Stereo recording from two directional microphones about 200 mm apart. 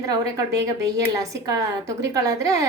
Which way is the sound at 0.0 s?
15° right (ahead or behind).